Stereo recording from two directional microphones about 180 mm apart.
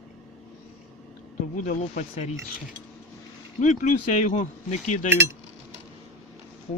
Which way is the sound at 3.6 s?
40° left (ahead or behind).